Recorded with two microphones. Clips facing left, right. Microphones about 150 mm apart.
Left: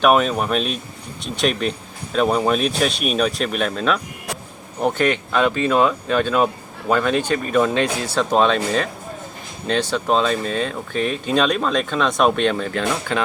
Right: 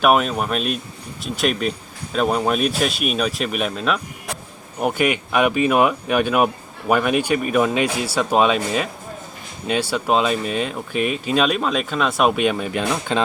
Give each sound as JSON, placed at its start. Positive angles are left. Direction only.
{"t": 0.0, "sound": "speech", "side_deg": -5}